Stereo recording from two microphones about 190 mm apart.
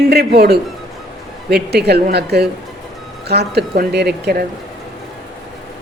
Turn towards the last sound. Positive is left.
turn(degrees=-60)  # may be behind; listen again after turning